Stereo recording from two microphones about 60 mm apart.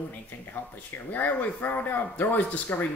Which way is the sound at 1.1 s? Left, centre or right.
Left.